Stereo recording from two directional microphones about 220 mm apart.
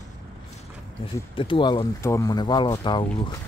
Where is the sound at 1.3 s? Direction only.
25° left (ahead or behind).